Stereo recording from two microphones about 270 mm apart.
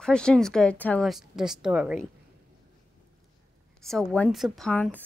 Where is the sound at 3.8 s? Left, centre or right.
Centre.